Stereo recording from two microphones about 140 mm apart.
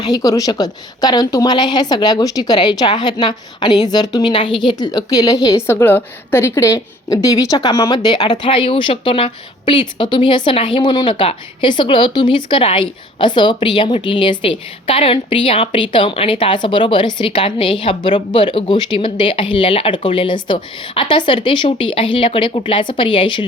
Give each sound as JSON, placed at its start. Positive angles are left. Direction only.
{"t": 0.0, "sound": "a woman's voice", "side_deg": 25}